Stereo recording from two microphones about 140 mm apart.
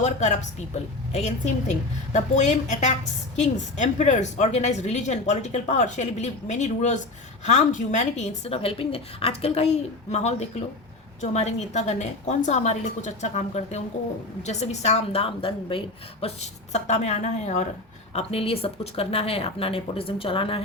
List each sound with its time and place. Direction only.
0.0 s a woman's voice: 55° left (ahead or behind)
16.2 s speech: 50° left (ahead or behind)
18.1 s speech: 45° left (ahead or behind)